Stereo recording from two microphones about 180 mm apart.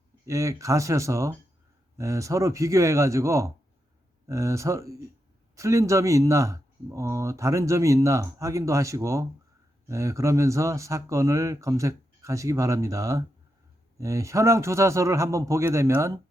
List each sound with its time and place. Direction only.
0.3 s speech: 15° right (ahead or behind)